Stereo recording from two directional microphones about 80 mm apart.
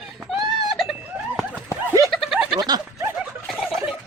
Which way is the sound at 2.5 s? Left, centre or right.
Right.